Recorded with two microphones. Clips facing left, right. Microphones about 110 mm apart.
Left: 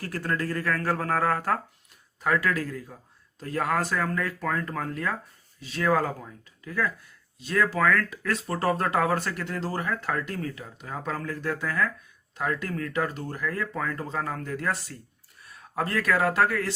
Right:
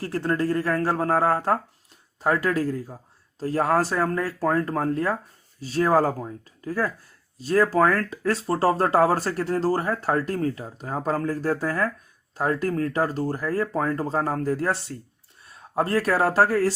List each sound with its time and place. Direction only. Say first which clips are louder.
0.0 s speech: right 5 dB; 30° right (ahead or behind)